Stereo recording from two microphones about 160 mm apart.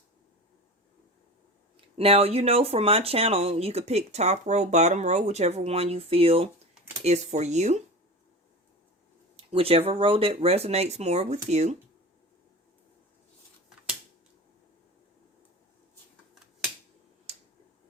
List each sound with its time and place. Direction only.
1.7 s speech: 40° right (ahead or behind)
9.3 s speech: 35° right (ahead or behind)